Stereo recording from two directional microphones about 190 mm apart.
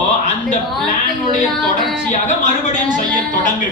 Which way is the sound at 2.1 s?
40° left (ahead or behind).